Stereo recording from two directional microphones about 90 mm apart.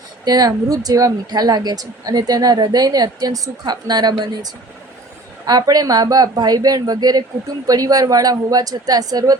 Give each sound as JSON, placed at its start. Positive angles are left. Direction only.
{"t": 0.3, "sound": "a woman's voice", "side_deg": -45}